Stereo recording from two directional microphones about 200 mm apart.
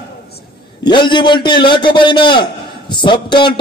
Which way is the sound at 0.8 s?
25° left (ahead or behind).